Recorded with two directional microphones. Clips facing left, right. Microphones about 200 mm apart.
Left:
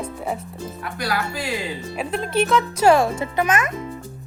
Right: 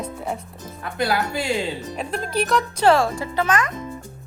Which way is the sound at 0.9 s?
25° right (ahead or behind).